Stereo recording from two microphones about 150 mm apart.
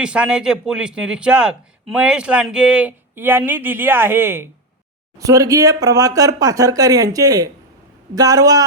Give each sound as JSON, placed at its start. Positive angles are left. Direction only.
{"t": 0.0, "sound": "a man's voice", "side_deg": -5}